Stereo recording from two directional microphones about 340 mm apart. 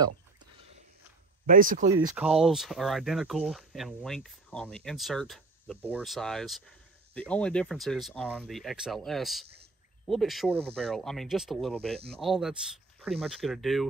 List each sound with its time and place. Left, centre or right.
1.4 s speech: right
2.0 s speech: centre